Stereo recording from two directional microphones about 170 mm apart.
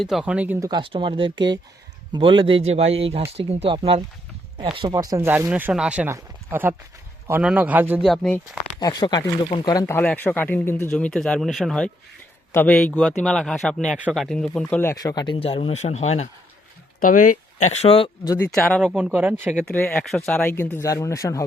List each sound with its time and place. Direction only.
0.0 s speech: centre (ahead or behind)
0.7 s speech: 30° right (ahead or behind); by 8.0 s 10° right (ahead or behind)
8.0 s speech: centre (ahead or behind)
8.8 s speech: 20° left (ahead or behind)
9.8 s speech: 10° left (ahead or behind); by 16.3 s 40° left (ahead or behind)
17.0 s speech: 55° left (ahead or behind); by 18.1 s 35° left (ahead or behind)
18.4 s speech: 5° left (ahead or behind)
19.6 s speech: 5° left (ahead or behind)